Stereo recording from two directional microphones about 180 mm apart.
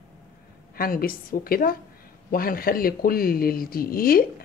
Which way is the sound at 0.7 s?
55° left (ahead or behind).